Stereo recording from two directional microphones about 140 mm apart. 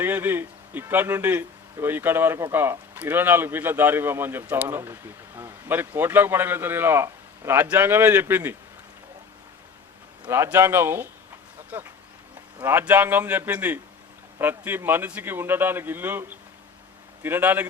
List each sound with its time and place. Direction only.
0.0 s a man's voice: 15° right (ahead or behind)
10.2 s a man's voice: 20° right (ahead or behind)
17.2 s a man's voice: 15° right (ahead or behind)